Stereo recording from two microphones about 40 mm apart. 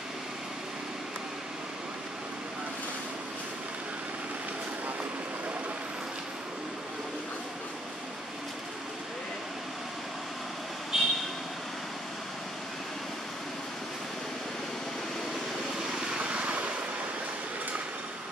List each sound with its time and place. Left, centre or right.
10.9 s vehicle: centre
15.9 s vehicle: right